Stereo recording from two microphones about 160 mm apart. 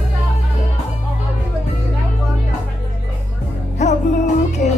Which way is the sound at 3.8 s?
45° left (ahead or behind).